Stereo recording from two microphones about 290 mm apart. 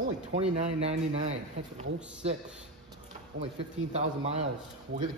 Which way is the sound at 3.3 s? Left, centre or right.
Right.